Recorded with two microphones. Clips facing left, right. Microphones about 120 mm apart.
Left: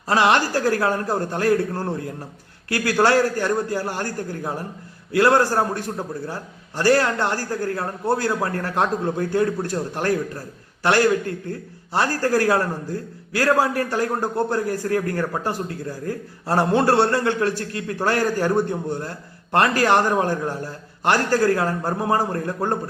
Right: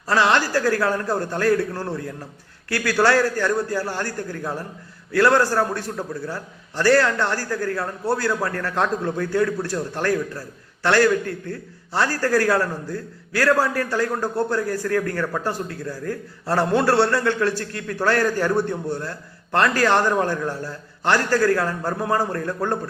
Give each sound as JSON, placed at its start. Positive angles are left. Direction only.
{"t": 0.1, "sound": "a man's voice", "side_deg": 20}
{"t": 0.3, "sound": "speech", "side_deg": 40}
{"t": 0.8, "sound": "a man's voice", "side_deg": 25}
{"t": 15.3, "sound": "a man's voice", "side_deg": 15}
{"t": 18.4, "sound": "a man's voice", "side_deg": 20}